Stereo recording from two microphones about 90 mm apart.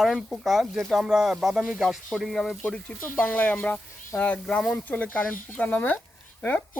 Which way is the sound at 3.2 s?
15° left (ahead or behind).